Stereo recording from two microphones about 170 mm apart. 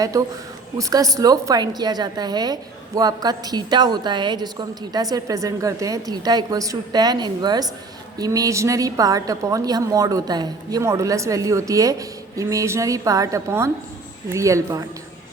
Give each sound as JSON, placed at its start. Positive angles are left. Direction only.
{"t": 0.0, "sound": "a woman's voice", "side_deg": -20}